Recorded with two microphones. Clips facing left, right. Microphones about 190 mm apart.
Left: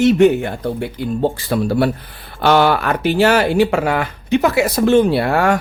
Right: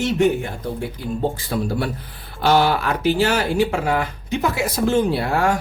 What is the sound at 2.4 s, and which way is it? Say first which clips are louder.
Speech: left 3 dB; 65° left (ahead or behind).